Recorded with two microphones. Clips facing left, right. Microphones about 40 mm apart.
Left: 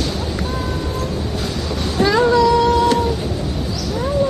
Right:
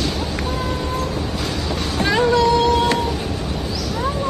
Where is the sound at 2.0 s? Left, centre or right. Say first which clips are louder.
Left 3 dB; right.